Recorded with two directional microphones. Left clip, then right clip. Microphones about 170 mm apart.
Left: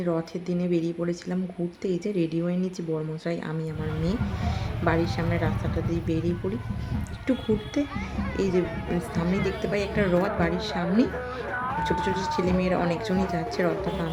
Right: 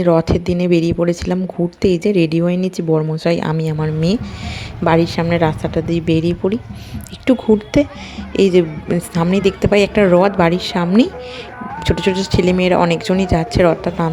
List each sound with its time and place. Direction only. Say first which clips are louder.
0.0 s speech: right 15 dB; 50° right (ahead or behind)